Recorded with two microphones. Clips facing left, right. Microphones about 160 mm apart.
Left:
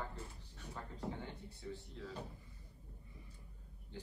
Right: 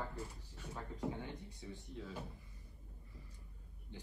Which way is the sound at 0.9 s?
15° right (ahead or behind).